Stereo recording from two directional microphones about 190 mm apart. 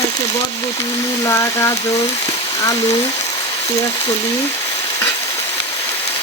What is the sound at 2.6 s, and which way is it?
Speech, 20° left (ahead or behind).